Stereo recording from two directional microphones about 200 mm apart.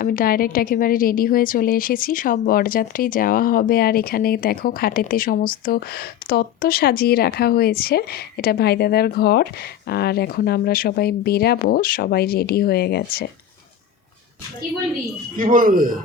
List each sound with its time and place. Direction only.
0.0 s a woman's voice: 45° left (ahead or behind)
15.4 s speech: 45° right (ahead or behind)